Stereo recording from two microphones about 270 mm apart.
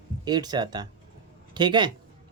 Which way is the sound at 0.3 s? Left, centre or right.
Centre.